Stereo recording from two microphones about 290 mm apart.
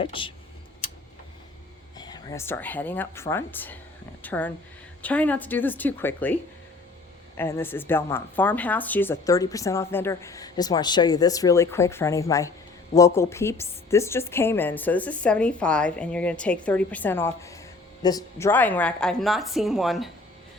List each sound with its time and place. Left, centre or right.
0.0 s speech: centre
2.0 s a woman's voice: centre
7.3 s a woman's voice: centre